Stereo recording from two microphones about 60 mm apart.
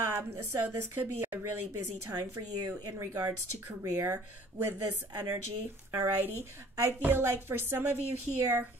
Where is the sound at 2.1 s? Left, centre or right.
Right.